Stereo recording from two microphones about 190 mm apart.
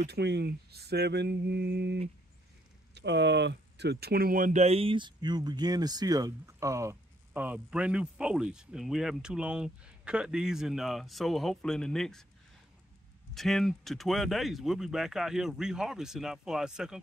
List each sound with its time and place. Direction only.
0.0 s speech: 60° right (ahead or behind); by 12.3 s 5° left (ahead or behind)
13.3 s speech: centre (ahead or behind)